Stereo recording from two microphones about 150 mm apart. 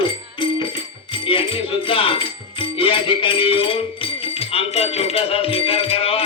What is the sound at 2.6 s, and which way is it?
Music, 35° left (ahead or behind).